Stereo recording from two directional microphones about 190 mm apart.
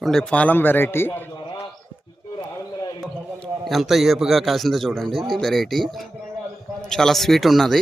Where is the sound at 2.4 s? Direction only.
20° left (ahead or behind).